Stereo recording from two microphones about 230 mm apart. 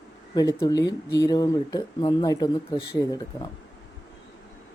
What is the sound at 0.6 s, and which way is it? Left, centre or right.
Speech, centre.